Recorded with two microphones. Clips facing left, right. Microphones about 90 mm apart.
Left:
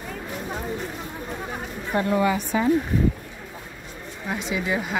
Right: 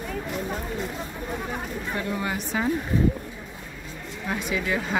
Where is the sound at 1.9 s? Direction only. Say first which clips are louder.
Left 8 dB; 30° left (ahead or behind).